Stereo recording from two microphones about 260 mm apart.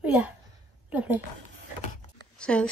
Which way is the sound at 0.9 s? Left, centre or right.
Centre.